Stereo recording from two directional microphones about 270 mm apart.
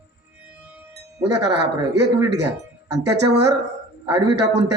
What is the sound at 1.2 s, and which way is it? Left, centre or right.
Speech, right.